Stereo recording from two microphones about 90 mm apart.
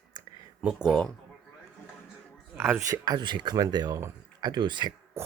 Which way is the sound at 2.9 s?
50° right (ahead or behind).